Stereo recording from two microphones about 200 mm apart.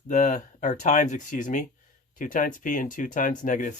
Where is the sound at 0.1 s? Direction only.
35° left (ahead or behind).